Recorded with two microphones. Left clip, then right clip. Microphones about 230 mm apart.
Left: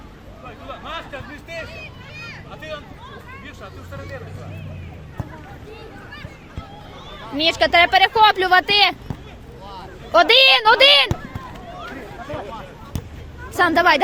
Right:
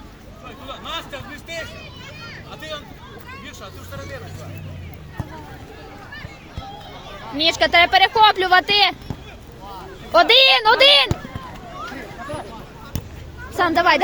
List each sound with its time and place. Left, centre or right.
0.4 s vehicle: right
2.1 s a sound: left
2.5 s a sound: right
3.4 s speech: right
7.3 s speech: centre
13.6 s speech: centre